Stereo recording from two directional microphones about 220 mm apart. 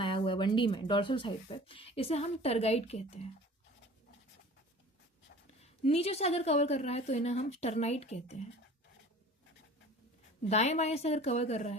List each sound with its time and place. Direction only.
0.0 s speech: 25° left (ahead or behind)
5.8 s speech: 30° left (ahead or behind)
10.4 s speech: 30° left (ahead or behind)